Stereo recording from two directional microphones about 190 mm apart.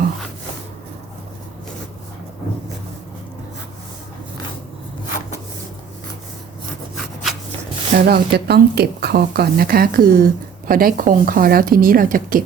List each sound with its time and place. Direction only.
6.9 s rub: centre (ahead or behind)
7.9 s a woman's voice: 55° right (ahead or behind)